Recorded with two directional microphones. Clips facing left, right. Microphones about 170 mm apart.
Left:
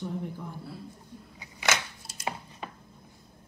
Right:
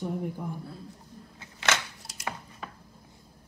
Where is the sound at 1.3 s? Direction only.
15° left (ahead or behind).